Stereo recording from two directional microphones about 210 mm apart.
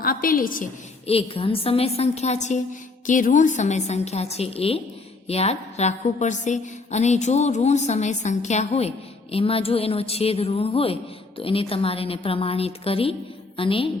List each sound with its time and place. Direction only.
0.0 s a woman's voice: 45° left (ahead or behind)
1.0 s a woman's voice: 25° left (ahead or behind)